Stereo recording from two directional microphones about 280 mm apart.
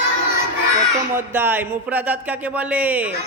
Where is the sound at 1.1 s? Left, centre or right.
Centre.